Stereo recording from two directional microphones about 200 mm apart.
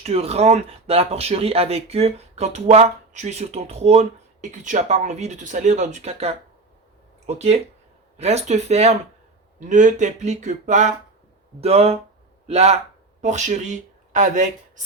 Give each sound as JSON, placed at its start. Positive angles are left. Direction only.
{"t": 0.0, "sound": "speech", "side_deg": -30}